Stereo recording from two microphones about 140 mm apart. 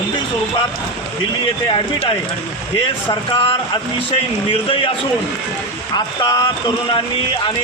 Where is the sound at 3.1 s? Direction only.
35° left (ahead or behind).